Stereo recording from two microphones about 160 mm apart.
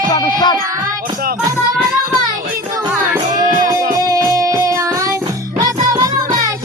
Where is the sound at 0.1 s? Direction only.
25° left (ahead or behind).